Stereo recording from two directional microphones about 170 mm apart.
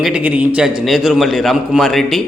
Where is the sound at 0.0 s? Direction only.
10° right (ahead or behind).